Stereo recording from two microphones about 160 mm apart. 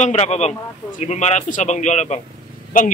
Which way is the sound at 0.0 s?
40° left (ahead or behind).